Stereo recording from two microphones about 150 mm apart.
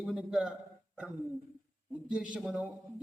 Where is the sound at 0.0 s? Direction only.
Centre (ahead or behind).